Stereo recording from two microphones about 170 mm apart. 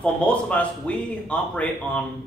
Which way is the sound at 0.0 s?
5° left (ahead or behind).